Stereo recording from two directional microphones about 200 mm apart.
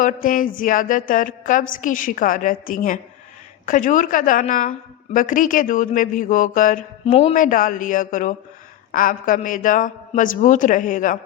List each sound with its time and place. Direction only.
0.0 s a woman's voice: 40° left (ahead or behind)
7.0 s a man's voice: 30° left (ahead or behind)